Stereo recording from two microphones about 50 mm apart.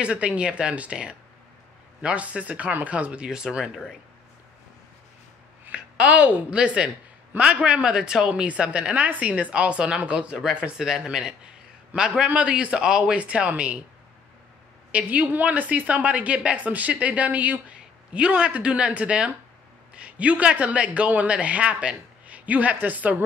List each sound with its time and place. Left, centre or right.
0.0 s a man's voice: right
3.3 s a man's voice: centre
5.7 s a woman's voice: right
8.3 s a man's voice: right
10.8 s a man's voice: centre
12.7 s a man's voice: centre
13.2 s a man's voice: right
14.9 s a man's voice: right
17.7 s a sound: centre
18.5 s a man's voice: right